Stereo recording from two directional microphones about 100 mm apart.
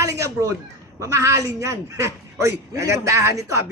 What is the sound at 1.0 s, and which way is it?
A man's voice, 30° right (ahead or behind).